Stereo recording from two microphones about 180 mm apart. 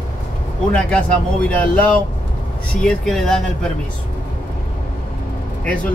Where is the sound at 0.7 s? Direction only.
5° left (ahead or behind).